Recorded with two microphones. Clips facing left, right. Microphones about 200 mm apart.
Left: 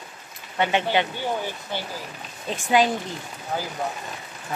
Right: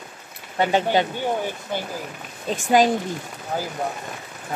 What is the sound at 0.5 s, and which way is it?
Speech, 40° right (ahead or behind).